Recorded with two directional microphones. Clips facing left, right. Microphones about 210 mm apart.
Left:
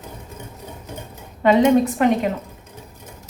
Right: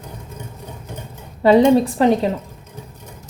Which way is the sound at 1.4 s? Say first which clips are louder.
Right 2 dB; 30° right (ahead or behind).